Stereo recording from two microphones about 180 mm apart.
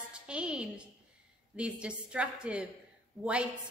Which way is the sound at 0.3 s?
5° right (ahead or behind).